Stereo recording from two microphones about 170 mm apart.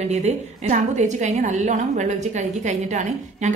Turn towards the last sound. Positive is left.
turn(degrees=-45)  # may be behind; listen again after turning